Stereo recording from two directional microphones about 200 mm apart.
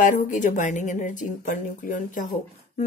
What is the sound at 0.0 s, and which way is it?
A woman's voice, 40° left (ahead or behind).